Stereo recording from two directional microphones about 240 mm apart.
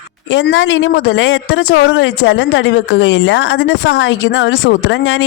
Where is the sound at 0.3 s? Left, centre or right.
Left.